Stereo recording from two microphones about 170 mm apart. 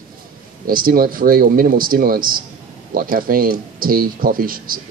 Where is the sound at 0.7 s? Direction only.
55° right (ahead or behind).